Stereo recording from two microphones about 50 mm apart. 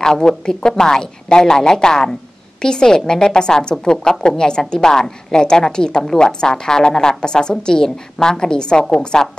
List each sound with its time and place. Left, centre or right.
0.0 s a woman's voice: centre